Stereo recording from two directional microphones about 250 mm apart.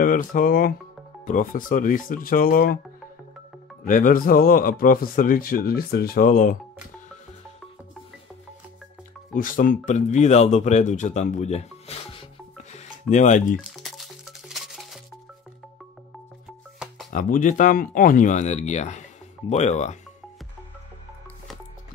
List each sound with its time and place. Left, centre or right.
0.0 s speech: left
3.8 s speech: left
9.3 s speech: left
13.6 s music: centre
16.4 s music: centre
17.1 s speech: left